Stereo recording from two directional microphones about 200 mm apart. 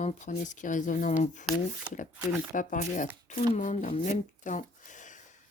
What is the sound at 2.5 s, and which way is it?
Speech, 40° left (ahead or behind).